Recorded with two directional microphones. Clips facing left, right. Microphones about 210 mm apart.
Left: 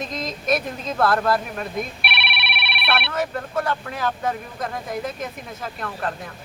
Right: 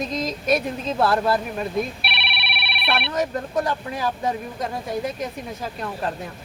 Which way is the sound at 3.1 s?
15° right (ahead or behind).